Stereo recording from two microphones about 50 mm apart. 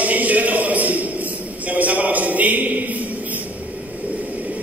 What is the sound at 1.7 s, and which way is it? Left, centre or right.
Speech, right.